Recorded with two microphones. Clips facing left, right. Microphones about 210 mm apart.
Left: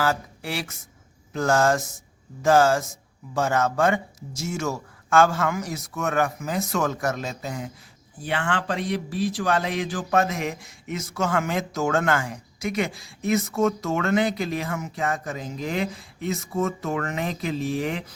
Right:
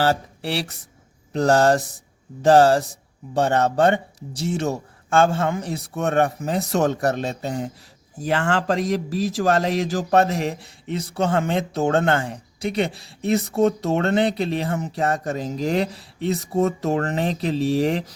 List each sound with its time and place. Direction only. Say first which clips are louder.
0.0 s a man's voice: right 4 dB; 35° right (ahead or behind)